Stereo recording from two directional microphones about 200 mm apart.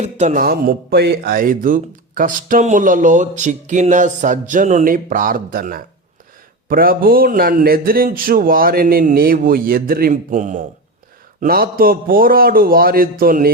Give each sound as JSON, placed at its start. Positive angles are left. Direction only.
{"t": 0.0, "sound": "a man's voice", "side_deg": -35}